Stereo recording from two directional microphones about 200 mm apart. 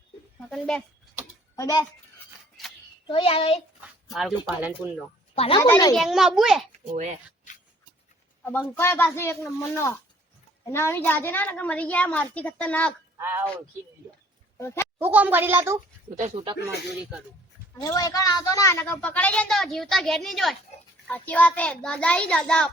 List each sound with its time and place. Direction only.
0.3 s speech: 5° left (ahead or behind)
1.2 s a sound: 15° left (ahead or behind)
3.1 s a child's voice: 30° left (ahead or behind)
3.8 s speech: centre (ahead or behind)
5.3 s speech: 30° left (ahead or behind)
5.5 s a child's voice: 20° left (ahead or behind)
5.9 s a child's voice: centre (ahead or behind)
6.9 s speech: 35° right (ahead or behind)
8.4 s a woman's voice: 10° left (ahead or behind)
13.1 s a woman's voice: 10° right (ahead or behind)
14.9 s a woman's voice: 10° right (ahead or behind)
16.1 s speech: 30° right (ahead or behind)
16.6 s a woman's voice: 5° right (ahead or behind)
17.7 s a woman's voice: 15° left (ahead or behind)